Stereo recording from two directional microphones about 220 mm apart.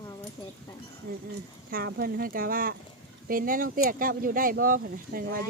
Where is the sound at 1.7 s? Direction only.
45° right (ahead or behind).